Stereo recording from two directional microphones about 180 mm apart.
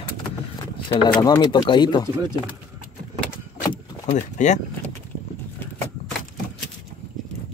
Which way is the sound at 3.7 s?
25° left (ahead or behind).